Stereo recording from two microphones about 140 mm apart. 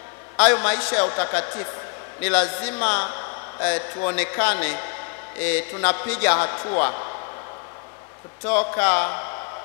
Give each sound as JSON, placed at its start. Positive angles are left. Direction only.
{"t": 0.4, "sound": "a man's voice", "side_deg": 20}
{"t": 8.5, "sound": "a man's voice", "side_deg": 20}